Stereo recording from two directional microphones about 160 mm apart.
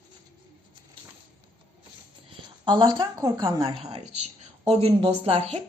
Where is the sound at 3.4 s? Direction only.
35° right (ahead or behind).